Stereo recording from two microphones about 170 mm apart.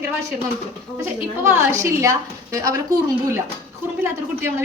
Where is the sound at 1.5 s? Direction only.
15° right (ahead or behind).